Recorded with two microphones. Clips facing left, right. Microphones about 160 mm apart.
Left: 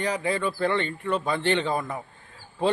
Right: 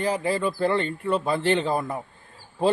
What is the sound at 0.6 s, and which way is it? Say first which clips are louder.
Speech: right 2 dB; 35° right (ahead or behind).